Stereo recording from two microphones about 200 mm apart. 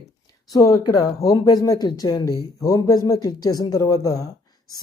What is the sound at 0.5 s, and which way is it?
Speech, 20° left (ahead or behind).